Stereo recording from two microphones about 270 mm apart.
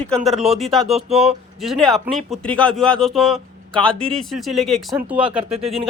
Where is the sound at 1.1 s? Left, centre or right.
Right.